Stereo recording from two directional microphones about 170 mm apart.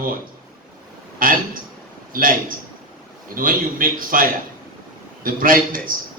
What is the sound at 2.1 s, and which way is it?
A man's voice, 55° right (ahead or behind).